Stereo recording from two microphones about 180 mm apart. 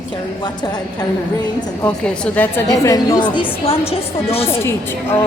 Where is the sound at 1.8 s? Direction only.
5° left (ahead or behind).